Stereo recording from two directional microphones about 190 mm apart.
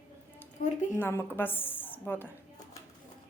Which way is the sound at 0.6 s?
40° left (ahead or behind).